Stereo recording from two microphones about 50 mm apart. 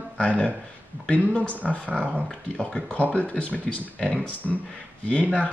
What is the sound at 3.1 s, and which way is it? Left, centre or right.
Speech, left.